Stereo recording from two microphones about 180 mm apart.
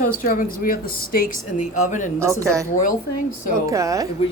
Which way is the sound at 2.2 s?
15° right (ahead or behind).